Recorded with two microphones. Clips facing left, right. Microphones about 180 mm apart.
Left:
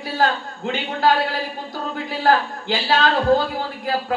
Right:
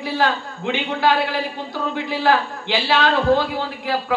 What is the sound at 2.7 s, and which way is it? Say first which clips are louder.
Speech: right 1 dB; 45° left (ahead or behind).